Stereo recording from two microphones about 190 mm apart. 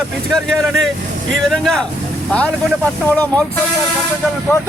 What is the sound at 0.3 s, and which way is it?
A man's voice, centre (ahead or behind).